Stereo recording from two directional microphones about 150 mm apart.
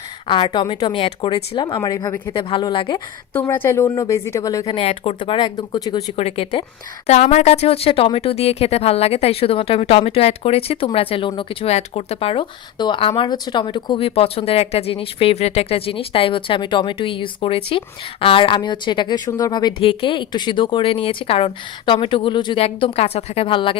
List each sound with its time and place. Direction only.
0.3 s speech: 30° left (ahead or behind)
1.8 s speech: 25° left (ahead or behind)
3.3 s speech: 15° left (ahead or behind)
4.7 s speech: 40° left (ahead or behind)
6.1 s speech: 40° left (ahead or behind)
7.1 s speech: 50° left (ahead or behind)